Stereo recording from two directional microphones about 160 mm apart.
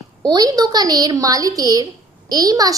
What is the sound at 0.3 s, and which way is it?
A woman's voice, 25° right (ahead or behind).